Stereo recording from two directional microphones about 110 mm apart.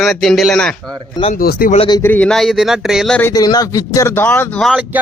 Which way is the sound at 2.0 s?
15° left (ahead or behind).